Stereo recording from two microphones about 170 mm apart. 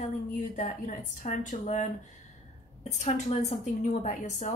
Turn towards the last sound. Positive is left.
turn(degrees=50)  # may be behind; listen again after turning